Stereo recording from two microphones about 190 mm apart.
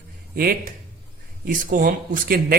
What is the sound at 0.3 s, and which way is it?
Speech, 50° right (ahead or behind).